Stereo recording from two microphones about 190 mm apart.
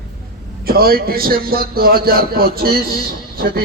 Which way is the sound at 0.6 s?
50° right (ahead or behind).